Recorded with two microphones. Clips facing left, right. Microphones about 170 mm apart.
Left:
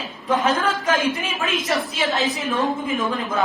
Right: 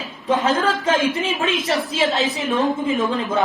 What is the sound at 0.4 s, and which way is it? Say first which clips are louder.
Speech: right 2 dB; 25° right (ahead or behind).